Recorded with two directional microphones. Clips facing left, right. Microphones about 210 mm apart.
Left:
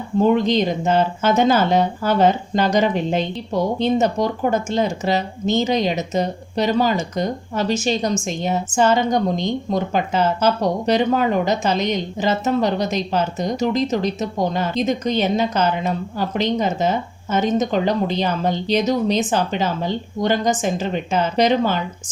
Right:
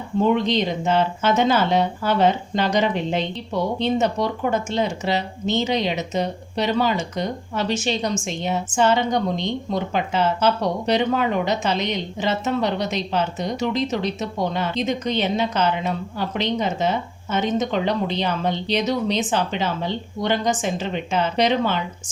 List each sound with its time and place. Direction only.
0.2 s speech: 45° left (ahead or behind)